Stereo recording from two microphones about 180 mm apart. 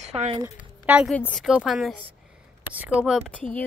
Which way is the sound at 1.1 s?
5° left (ahead or behind).